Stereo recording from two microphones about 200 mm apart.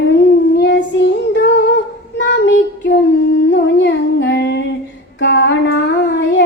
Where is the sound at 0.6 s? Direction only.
65° left (ahead or behind).